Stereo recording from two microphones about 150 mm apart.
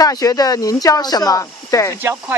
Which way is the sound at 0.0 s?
25° left (ahead or behind).